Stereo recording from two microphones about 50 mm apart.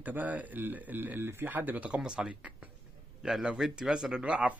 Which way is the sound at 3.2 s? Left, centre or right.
Centre.